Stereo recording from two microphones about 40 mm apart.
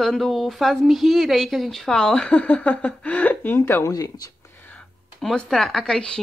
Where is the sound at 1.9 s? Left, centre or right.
Left.